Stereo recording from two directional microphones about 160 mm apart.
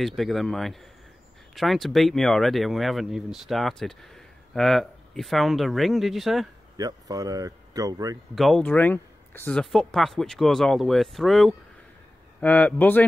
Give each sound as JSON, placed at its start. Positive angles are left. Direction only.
{"t": 0.0, "sound": "speech", "side_deg": 0}
{"t": 6.8, "sound": "speech", "side_deg": -25}
{"t": 8.4, "sound": "a man's voice", "side_deg": 0}